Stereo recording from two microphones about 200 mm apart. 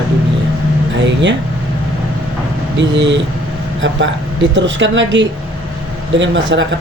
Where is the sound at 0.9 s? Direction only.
65° right (ahead or behind).